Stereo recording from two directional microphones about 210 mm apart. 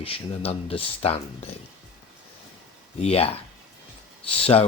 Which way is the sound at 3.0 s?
30° left (ahead or behind).